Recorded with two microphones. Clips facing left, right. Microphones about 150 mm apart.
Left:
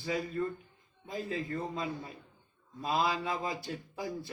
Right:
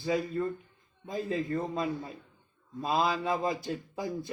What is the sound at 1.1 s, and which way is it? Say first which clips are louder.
Mantra: right 4 dB; 25° right (ahead or behind).